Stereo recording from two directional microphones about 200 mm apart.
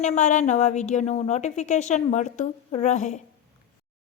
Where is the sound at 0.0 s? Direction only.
35° left (ahead or behind).